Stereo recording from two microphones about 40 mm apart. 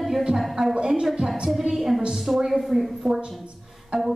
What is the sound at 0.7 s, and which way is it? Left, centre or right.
A woman's voice, centre.